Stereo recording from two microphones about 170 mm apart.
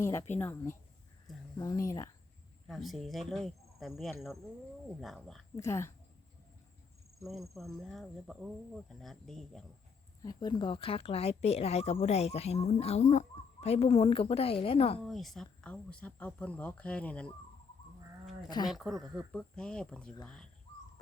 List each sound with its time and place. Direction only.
0.0 s speech: 15° left (ahead or behind)
2.6 s cricket: centre (ahead or behind)
5.5 s speech: 15° left (ahead or behind)
7.2 s cricket: centre (ahead or behind)
10.2 s speech: 25° left (ahead or behind)
15.0 s speech: centre (ahead or behind)
18.7 s cricket: centre (ahead or behind)
20.2 s speech: 5° left (ahead or behind)